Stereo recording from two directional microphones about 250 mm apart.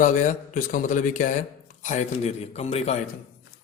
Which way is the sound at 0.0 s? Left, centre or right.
Left.